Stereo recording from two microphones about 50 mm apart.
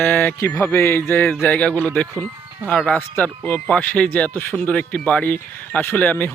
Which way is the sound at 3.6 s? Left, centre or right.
Left.